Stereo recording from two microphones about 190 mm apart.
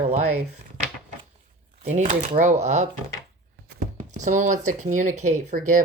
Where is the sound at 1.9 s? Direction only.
40° right (ahead or behind).